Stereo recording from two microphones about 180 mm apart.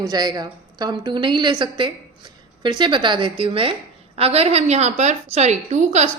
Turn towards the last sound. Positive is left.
turn(degrees=-40)  # may be behind; listen again after turning